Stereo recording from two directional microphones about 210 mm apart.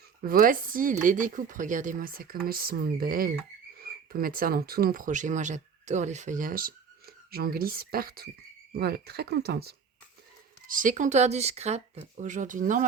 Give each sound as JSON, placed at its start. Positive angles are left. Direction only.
{"t": 0.3, "sound": "speech", "side_deg": -40}
{"t": 10.7, "sound": "speech", "side_deg": -40}